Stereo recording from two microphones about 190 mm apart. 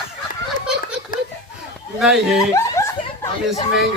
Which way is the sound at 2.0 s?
Centre (ahead or behind).